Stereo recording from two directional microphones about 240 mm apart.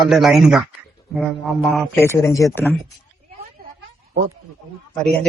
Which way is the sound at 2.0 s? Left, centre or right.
Centre.